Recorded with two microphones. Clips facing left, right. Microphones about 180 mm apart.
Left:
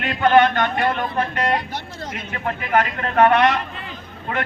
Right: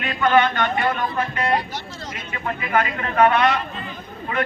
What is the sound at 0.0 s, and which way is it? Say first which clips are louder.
A man's voice: left 3 dB; 55° left (ahead or behind).